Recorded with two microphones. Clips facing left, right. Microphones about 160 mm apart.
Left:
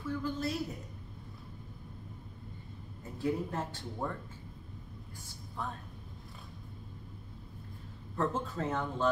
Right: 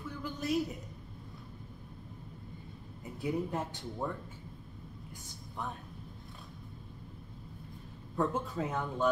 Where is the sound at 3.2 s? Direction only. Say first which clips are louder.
Even; 15° right (ahead or behind).